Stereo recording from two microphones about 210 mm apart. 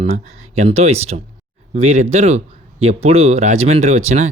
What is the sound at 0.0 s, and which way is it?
Speech, 30° right (ahead or behind).